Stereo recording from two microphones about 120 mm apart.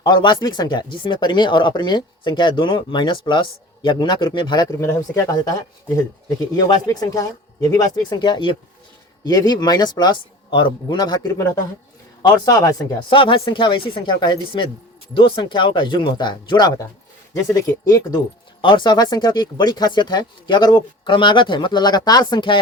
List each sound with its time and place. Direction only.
0.0 s speech: 40° left (ahead or behind)
4.8 s speech: 25° left (ahead or behind); by 8.5 s 40° left (ahead or behind)
9.2 s speech: 30° left (ahead or behind)
12.5 s speech: 30° left (ahead or behind)
13.1 s speech: 45° left (ahead or behind); by 18.2 s 30° left (ahead or behind)
18.6 s speech: 40° left (ahead or behind)